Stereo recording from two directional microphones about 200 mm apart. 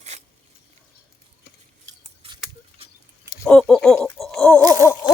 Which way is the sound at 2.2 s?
30° right (ahead or behind).